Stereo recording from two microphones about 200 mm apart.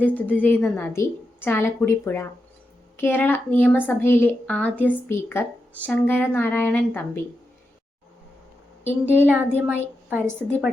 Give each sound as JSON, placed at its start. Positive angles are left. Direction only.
{"t": 0.0, "sound": "a woman's voice", "side_deg": 10}
{"t": 9.2, "sound": "a woman's voice", "side_deg": -10}